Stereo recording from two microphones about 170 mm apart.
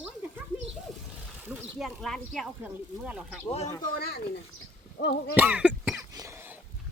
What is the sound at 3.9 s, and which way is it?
Speech, 65° left (ahead or behind).